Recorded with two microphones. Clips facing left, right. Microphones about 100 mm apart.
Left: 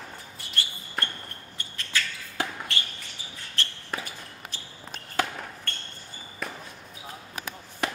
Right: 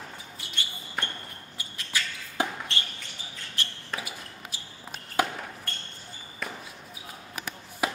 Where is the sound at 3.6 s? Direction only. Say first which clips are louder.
Left 2 dB; 15° right (ahead or behind).